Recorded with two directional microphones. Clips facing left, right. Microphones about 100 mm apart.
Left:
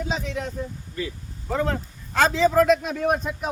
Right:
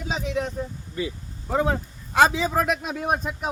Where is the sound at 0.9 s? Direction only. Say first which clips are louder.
Right 2 dB; 15° right (ahead or behind).